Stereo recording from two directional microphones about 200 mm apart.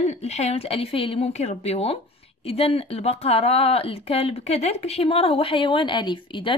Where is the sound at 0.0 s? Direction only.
35° left (ahead or behind).